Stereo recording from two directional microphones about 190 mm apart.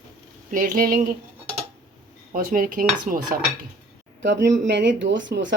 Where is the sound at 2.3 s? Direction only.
50° right (ahead or behind).